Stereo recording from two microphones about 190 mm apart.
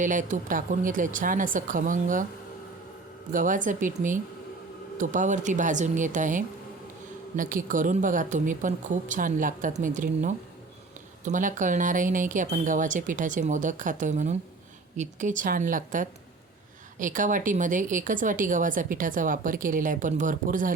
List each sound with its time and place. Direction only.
0.0 s a woman's voice: 40° right (ahead or behind)
3.3 s a woman's voice: 45° right (ahead or behind)